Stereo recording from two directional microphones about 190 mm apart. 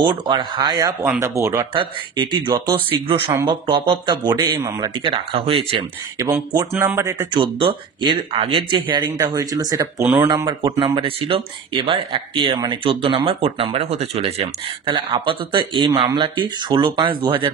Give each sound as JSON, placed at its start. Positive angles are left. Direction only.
{"t": 0.0, "sound": "speech", "side_deg": -25}
{"t": 1.7, "sound": "speech", "side_deg": -25}